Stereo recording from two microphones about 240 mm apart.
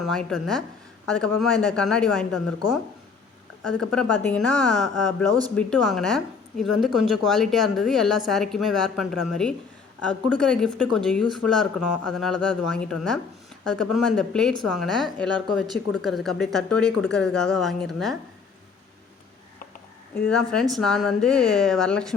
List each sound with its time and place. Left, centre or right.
0.0 s speech: centre
3.7 s speech: centre
20.3 s speech: centre